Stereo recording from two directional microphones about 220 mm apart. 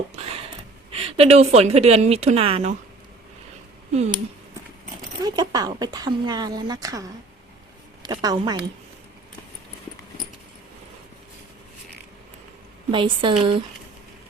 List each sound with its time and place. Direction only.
0.9 s a woman's voice: 25° right (ahead or behind)
5.2 s speech: 15° right (ahead or behind)
12.9 s a woman's voice: 20° right (ahead or behind)